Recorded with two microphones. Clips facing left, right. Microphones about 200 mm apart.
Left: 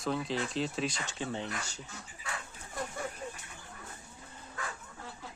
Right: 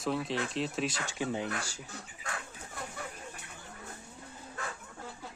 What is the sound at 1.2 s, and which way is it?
Speech, 10° right (ahead or behind).